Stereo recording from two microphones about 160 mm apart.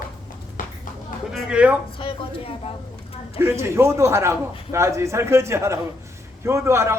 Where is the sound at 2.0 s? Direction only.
35° left (ahead or behind).